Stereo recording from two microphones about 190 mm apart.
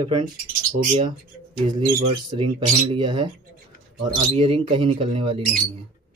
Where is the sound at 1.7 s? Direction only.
25° right (ahead or behind).